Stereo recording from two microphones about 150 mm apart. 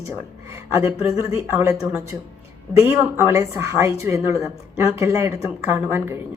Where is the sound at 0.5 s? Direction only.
20° right (ahead or behind).